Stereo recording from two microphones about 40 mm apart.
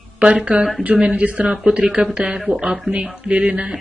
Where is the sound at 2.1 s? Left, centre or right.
Right.